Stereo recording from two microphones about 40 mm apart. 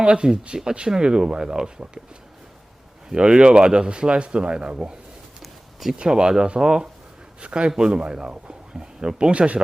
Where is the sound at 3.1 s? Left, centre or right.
Right.